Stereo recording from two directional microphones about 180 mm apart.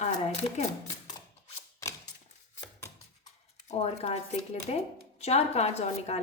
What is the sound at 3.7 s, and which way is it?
A woman's voice, 35° left (ahead or behind).